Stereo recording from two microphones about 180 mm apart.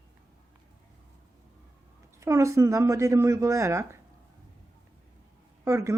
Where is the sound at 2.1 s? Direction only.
15° right (ahead or behind).